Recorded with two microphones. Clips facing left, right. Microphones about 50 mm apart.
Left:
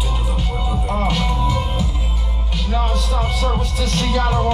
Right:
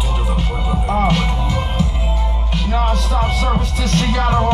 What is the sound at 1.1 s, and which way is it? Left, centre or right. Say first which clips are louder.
Music: right 1 dB; centre.